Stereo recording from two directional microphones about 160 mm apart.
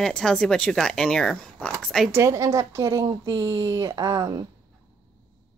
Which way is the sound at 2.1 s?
20° right (ahead or behind).